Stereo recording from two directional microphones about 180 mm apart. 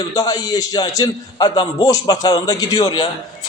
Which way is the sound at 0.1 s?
20° left (ahead or behind).